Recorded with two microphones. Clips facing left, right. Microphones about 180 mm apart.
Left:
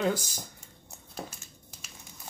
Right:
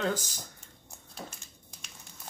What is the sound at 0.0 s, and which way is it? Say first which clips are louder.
Speech: left 3 dB; 10° left (ahead or behind).